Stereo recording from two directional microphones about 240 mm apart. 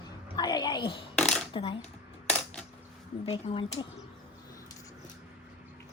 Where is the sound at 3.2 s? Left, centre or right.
Left.